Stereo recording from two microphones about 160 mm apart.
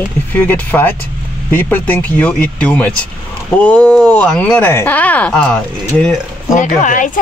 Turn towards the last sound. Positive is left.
turn(degrees=55)  # may be behind; listen again after turning